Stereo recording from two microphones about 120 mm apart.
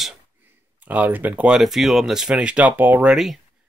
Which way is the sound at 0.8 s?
15° right (ahead or behind).